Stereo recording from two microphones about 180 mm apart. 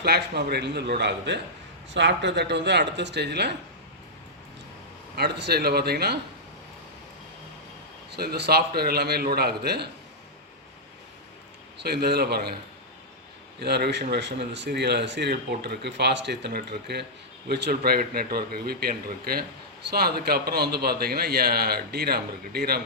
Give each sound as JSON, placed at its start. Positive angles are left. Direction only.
{"t": 0.0, "sound": "speech", "side_deg": -65}
{"t": 5.1, "sound": "a man's voice", "side_deg": -65}
{"t": 8.1, "sound": "a man's voice", "side_deg": -65}
{"t": 11.8, "sound": "a man's voice", "side_deg": -65}
{"t": 13.6, "sound": "a man's voice", "side_deg": -65}